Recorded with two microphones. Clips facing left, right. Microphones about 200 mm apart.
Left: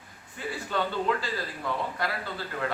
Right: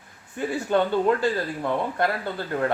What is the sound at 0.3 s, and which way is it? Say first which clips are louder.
Speech: right 8 dB; 55° right (ahead or behind).